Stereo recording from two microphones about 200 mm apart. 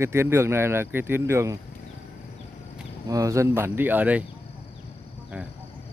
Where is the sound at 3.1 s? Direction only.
15° right (ahead or behind).